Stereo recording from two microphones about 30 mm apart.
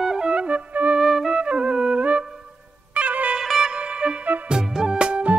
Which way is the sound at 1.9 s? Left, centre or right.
Right.